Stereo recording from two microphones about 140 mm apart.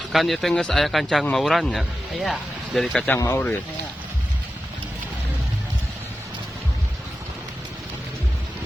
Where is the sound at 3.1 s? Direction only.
15° left (ahead or behind).